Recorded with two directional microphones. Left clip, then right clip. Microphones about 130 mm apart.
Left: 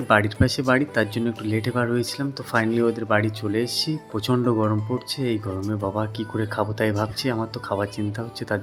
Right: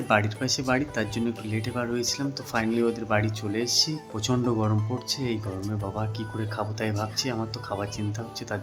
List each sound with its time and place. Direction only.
0.1 s speech: 25° left (ahead or behind)
6.0 s speech: 30° left (ahead or behind)